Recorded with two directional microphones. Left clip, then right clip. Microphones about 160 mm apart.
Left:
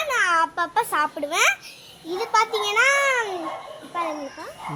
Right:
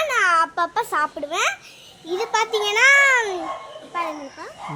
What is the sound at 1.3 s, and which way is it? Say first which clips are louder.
Speech: left 5 dB; 5° right (ahead or behind).